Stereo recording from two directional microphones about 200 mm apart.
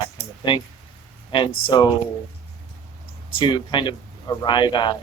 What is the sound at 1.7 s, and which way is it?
Speech, 20° left (ahead or behind).